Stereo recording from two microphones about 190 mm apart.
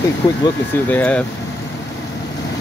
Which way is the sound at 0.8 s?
5° left (ahead or behind).